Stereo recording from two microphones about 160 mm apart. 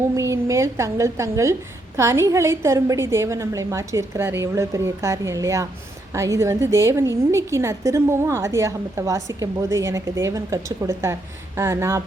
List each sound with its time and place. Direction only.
0.2 s a woman's voice: 20° right (ahead or behind)